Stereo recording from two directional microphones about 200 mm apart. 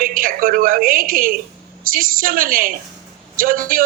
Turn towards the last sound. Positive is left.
turn(degrees=-45)  # may be behind; listen again after turning